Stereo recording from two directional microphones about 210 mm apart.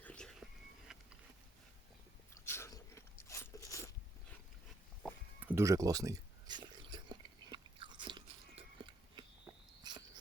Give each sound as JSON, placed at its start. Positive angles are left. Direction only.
{"t": 0.0, "sound": "whispering", "side_deg": 5}
{"t": 0.9, "sound": "insect", "side_deg": 0}
{"t": 2.3, "sound": "biting", "side_deg": 15}
{"t": 5.4, "sound": "a sound", "side_deg": -10}
{"t": 9.8, "sound": "cricket", "side_deg": -20}